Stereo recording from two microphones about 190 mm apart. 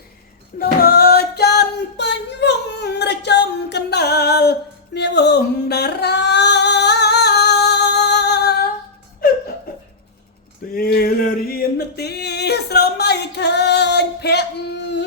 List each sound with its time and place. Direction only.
0.6 s singing: 55° left (ahead or behind)
4.9 s music: 65° left (ahead or behind)
10.8 s a sound: 55° left (ahead or behind)
11.9 s music: 60° left (ahead or behind)